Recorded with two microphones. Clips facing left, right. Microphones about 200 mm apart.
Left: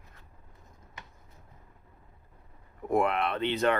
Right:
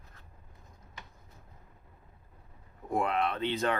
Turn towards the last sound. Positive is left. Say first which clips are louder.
# left 3 dB
turn(degrees=65)  # may be behind; listen again after turning